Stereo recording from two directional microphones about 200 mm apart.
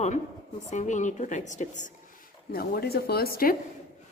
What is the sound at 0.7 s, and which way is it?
A woman's voice, 35° left (ahead or behind).